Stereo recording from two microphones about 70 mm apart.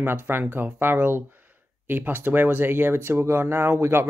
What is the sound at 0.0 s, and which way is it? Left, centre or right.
Speech, right.